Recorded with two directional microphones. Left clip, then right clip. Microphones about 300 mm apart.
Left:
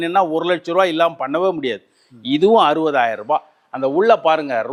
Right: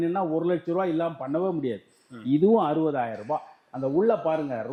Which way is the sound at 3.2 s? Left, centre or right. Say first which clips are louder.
Left 10 dB; centre.